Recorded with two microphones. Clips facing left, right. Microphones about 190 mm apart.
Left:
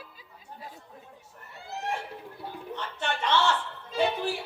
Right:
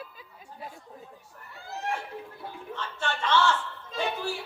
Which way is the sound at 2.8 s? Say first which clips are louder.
Even; 20° left (ahead or behind).